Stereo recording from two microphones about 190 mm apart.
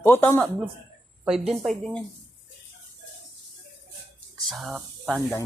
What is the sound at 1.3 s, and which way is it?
Speech, 5° right (ahead or behind).